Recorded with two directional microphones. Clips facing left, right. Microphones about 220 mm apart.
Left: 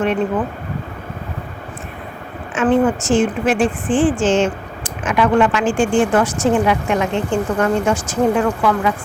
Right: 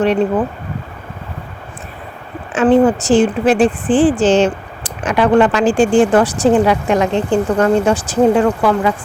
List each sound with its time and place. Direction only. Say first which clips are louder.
2.6 s speech: right 4 dB; 30° right (ahead or behind)